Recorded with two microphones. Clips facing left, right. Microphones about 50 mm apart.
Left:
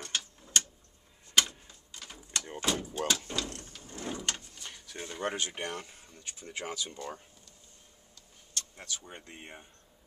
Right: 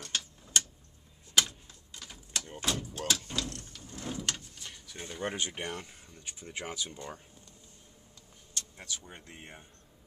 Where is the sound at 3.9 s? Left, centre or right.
Centre.